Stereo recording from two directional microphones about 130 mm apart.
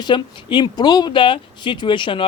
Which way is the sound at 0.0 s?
40° left (ahead or behind).